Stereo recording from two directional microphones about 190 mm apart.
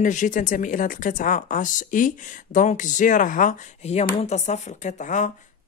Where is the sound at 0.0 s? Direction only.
40° left (ahead or behind).